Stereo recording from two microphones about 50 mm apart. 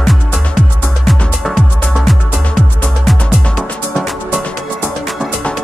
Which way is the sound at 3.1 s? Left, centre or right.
Centre.